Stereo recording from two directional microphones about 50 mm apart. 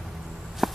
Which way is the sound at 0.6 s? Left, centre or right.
Centre.